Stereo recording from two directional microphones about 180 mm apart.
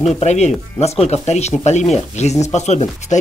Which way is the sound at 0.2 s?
40° left (ahead or behind).